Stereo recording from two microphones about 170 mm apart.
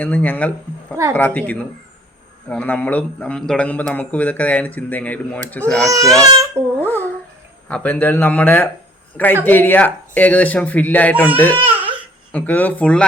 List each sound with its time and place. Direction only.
0.0 s speech: 10° left (ahead or behind)
6.2 s a child's voice: 20° right (ahead or behind)
6.8 s speech: 10° left (ahead or behind)
11.5 s a sound: 30° right (ahead or behind)
12.3 s speech: 10° left (ahead or behind)